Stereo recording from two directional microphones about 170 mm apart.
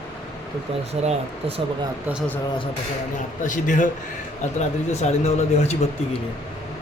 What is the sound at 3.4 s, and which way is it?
Speech, 50° left (ahead or behind).